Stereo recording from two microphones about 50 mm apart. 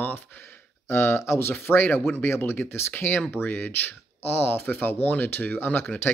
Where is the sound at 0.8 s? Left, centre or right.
Left.